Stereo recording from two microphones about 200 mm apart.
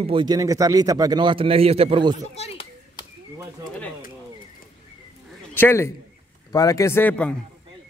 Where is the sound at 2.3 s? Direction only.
30° left (ahead or behind).